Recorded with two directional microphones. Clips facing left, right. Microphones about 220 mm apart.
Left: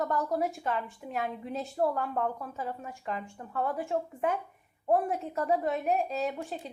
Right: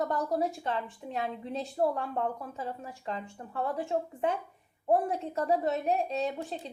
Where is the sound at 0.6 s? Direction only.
30° right (ahead or behind).